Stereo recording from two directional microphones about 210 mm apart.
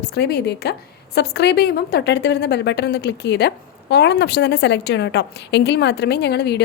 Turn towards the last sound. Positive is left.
turn(degrees=50)  # may be behind; listen again after turning